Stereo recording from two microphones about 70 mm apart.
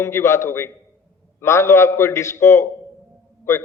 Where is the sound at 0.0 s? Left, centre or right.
Left.